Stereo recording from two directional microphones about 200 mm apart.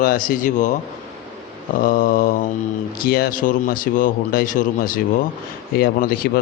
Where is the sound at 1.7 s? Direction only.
45° left (ahead or behind).